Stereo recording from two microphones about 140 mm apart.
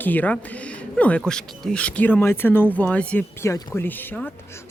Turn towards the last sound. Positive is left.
turn(degrees=15)  # may be behind; listen again after turning